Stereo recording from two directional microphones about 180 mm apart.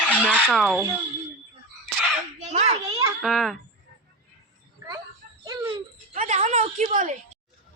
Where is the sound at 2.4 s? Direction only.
40° right (ahead or behind).